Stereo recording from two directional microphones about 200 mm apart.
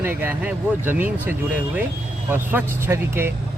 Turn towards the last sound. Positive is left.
turn(degrees=-10)  # may be behind; listen again after turning